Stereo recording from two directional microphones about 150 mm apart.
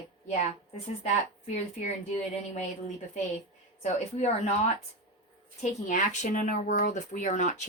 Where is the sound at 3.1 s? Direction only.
45° left (ahead or behind).